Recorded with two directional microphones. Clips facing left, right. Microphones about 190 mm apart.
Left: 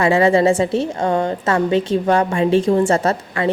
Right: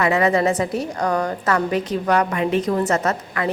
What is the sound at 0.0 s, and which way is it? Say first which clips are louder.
A woman's voice: left 4 dB; 30° left (ahead or behind).